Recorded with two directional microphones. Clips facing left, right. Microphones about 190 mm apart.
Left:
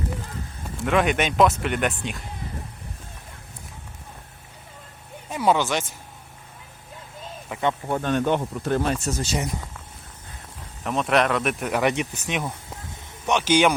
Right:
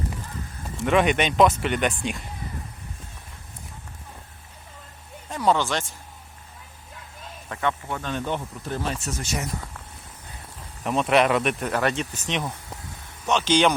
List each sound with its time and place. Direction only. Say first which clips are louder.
0.8 s speech: right 1 dB; centre (ahead or behind)
5.3 s speech: left 1 dB; 10° left (ahead or behind)
7.6 s speech: left 3 dB; 30° left (ahead or behind)
8.0 s speech: left 6 dB; 60° left (ahead or behind)
9.0 s speech: left 4 dB; 35° left (ahead or behind)
10.8 s speech: right 1 dB; centre (ahead or behind)
11.6 s speech: left 2 dB; 15° left (ahead or behind)